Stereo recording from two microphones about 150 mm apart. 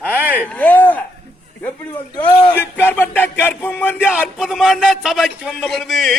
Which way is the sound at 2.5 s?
15° left (ahead or behind).